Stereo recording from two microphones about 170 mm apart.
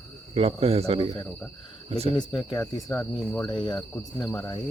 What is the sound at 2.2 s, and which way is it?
Speech, 25° left (ahead or behind).